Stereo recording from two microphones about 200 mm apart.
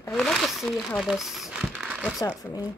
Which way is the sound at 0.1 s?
Centre (ahead or behind).